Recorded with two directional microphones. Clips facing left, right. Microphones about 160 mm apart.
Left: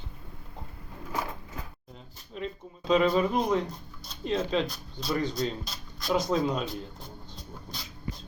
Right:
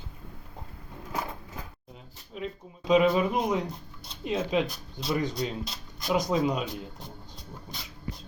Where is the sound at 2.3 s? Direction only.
10° right (ahead or behind).